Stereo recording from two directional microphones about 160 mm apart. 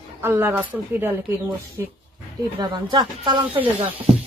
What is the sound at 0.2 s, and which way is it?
Speech, 15° right (ahead or behind).